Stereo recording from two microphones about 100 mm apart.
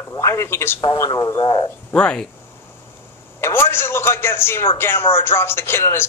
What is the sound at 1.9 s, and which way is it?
Speech, 10° left (ahead or behind).